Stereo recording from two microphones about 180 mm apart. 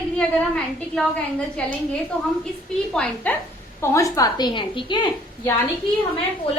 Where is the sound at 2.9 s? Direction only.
10° left (ahead or behind); by 5.1 s 25° left (ahead or behind).